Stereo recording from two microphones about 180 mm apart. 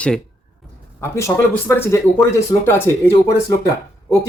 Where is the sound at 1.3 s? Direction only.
25° left (ahead or behind).